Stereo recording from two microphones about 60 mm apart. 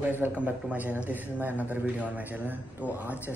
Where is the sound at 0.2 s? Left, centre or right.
Right.